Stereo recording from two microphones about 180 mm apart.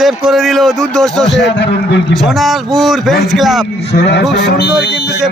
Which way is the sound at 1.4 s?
70° left (ahead or behind).